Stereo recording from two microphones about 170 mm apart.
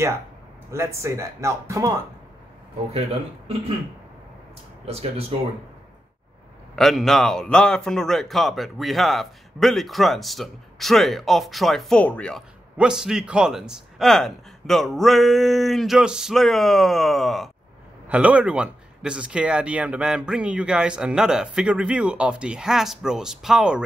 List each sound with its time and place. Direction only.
0.7 s speech: 15° right (ahead or behind)
2.9 s speech: 35° right (ahead or behind)
4.8 s speech: 35° right (ahead or behind)
6.7 s a man's voice: centre (ahead or behind)